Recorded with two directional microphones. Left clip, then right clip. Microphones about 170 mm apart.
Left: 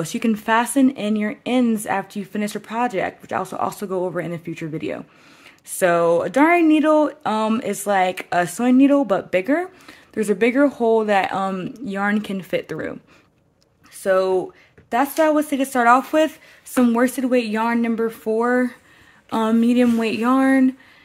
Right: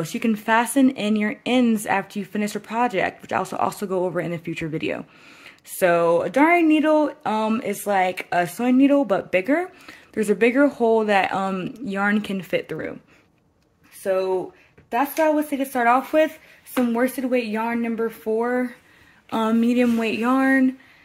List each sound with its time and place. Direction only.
0.0 s speech: 20° left (ahead or behind); by 5.5 s 5° left (ahead or behind)
5.8 s speech: 15° left (ahead or behind)
14.0 s speech: 50° left (ahead or behind)
19.3 s speech: 25° left (ahead or behind)